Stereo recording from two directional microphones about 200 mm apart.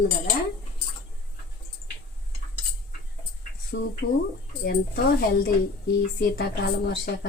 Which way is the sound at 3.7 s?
55° left (ahead or behind).